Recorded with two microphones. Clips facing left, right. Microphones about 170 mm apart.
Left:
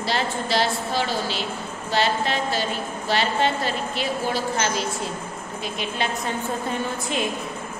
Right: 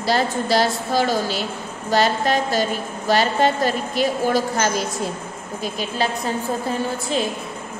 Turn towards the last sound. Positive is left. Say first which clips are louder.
# right 3 dB
turn(degrees=-35)  # may be behind; listen again after turning